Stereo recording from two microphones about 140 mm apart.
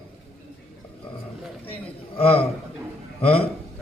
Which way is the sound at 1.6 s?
45° left (ahead or behind).